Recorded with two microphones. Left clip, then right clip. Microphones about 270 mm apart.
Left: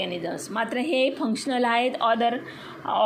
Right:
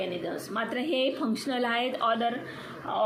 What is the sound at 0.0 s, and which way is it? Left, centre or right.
A woman's voice, left.